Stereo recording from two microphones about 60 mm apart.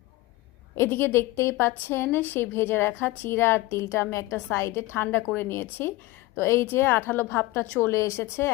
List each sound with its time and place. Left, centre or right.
0.8 s a woman's voice: left
3.7 s a woman's voice: left
7.8 s a woman's voice: left